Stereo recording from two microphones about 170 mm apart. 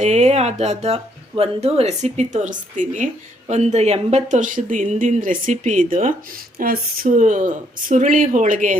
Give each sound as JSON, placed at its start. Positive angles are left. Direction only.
{"t": 0.0, "sound": "speech", "side_deg": -40}